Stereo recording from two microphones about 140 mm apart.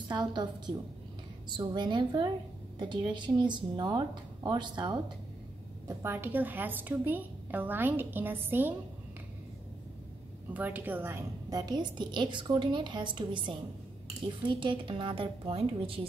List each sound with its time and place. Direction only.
0.1 s a woman's voice: 30° right (ahead or behind)
1.5 s a woman's voice: 35° right (ahead or behind)
5.9 s a woman's voice: 15° right (ahead or behind)
10.5 s a woman's voice: 10° right (ahead or behind); by 16.1 s 40° right (ahead or behind)